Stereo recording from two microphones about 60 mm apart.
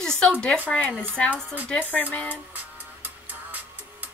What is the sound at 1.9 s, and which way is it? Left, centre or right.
Speech, left.